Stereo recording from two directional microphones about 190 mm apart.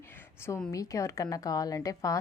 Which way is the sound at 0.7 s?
15° left (ahead or behind).